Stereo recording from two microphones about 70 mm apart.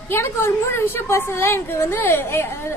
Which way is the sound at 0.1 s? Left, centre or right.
Left.